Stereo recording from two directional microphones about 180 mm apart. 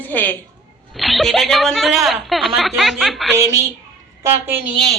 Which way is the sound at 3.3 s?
15° right (ahead or behind).